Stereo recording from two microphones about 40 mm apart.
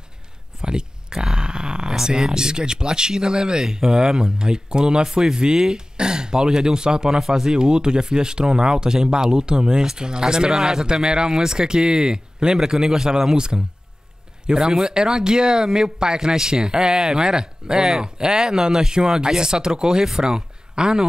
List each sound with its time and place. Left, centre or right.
0.6 s speech: right